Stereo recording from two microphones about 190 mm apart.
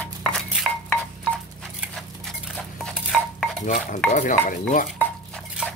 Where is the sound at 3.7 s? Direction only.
40° left (ahead or behind).